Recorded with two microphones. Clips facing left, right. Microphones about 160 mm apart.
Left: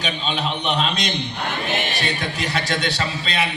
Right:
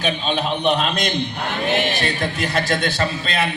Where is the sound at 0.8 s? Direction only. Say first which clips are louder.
Right 2 dB; 50° right (ahead or behind).